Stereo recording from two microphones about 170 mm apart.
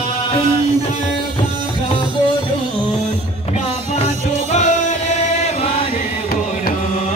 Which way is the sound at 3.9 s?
40° left (ahead or behind).